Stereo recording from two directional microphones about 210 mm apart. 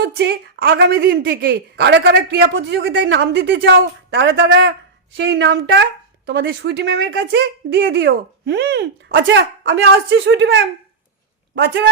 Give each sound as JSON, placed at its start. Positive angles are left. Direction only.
{"t": 0.0, "sound": "a woman's voice", "side_deg": -55}
{"t": 0.9, "sound": "a woman's voice", "side_deg": -45}